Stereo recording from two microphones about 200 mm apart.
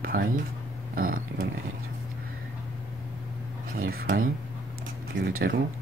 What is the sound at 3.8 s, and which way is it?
Speech, 45° right (ahead or behind).